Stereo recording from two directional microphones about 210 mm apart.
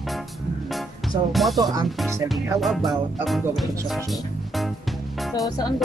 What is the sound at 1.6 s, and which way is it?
Music, 15° right (ahead or behind).